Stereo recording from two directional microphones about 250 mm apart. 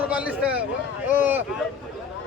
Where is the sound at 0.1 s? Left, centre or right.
Centre.